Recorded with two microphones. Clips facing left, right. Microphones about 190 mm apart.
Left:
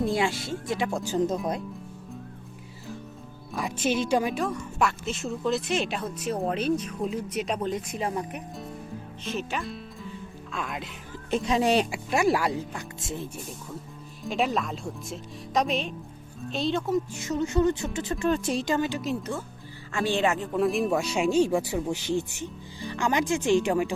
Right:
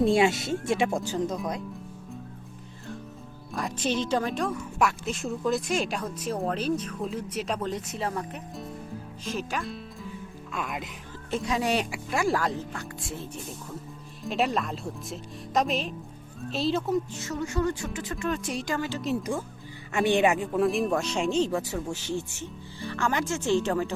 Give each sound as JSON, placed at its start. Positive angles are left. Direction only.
{"t": 0.0, "sound": "speech", "side_deg": -25}
{"t": 1.0, "sound": "speech", "side_deg": 20}
{"t": 3.5, "sound": "speech", "side_deg": 5}
{"t": 9.2, "sound": "music", "side_deg": 0}
{"t": 11.3, "sound": "speech", "side_deg": 20}
{"t": 13.0, "sound": "speech", "side_deg": 20}
{"t": 14.3, "sound": "speech", "side_deg": 0}
{"t": 17.2, "sound": "speech", "side_deg": 20}
{"t": 19.0, "sound": "speech", "side_deg": -10}
{"t": 20.5, "sound": "speech", "side_deg": 0}